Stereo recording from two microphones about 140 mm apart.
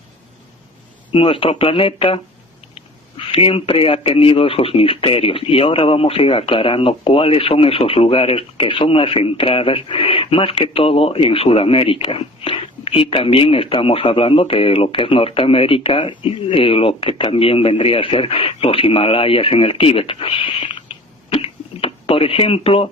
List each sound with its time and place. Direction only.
1.1 s speech: 40° left (ahead or behind)
3.3 s speech: 40° left (ahead or behind)